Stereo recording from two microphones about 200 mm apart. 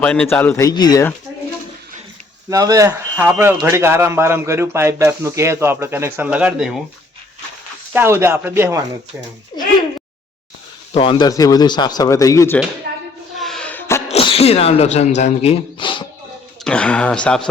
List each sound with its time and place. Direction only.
0.0 s a man's voice: 5° left (ahead or behind)
2.5 s speech: 15° right (ahead or behind)
7.9 s speech: 15° right (ahead or behind)
10.9 s speech: 25° left (ahead or behind)
12.9 s a sound: 55° right (ahead or behind)
13.4 s music: 5° left (ahead or behind)
14.1 s speech: 30° left (ahead or behind)
16.6 s speech: 5° left (ahead or behind)